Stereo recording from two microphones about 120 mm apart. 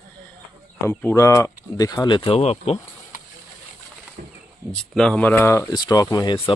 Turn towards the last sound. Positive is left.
turn(degrees=35)  # may be behind; listen again after turning